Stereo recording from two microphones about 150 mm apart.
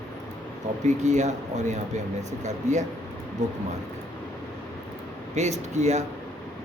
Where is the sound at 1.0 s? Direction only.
50° right (ahead or behind).